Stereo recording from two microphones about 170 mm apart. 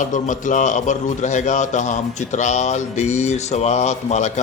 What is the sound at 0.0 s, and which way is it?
Speech, 50° left (ahead or behind).